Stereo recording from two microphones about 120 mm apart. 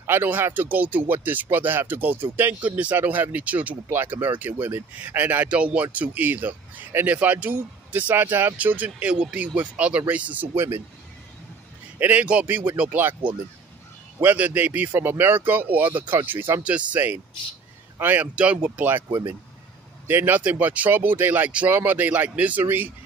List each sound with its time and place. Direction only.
0.0 s speech: 15° right (ahead or behind)
12.0 s speech: 15° right (ahead or behind)